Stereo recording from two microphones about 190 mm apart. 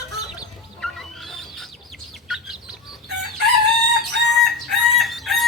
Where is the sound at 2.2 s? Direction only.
Centre (ahead or behind).